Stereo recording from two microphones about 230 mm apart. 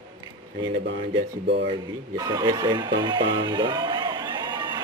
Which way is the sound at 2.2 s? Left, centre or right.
Centre.